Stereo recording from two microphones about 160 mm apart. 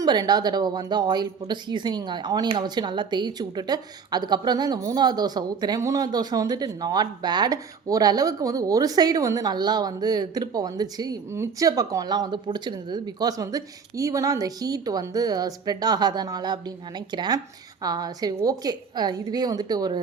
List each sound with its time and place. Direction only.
0.0 s speech: 25° right (ahead or behind)